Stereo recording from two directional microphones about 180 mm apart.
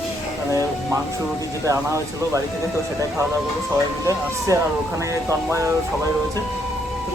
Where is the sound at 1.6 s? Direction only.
15° right (ahead or behind).